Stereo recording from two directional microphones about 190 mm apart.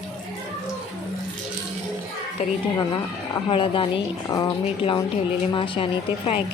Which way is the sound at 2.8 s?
25° left (ahead or behind).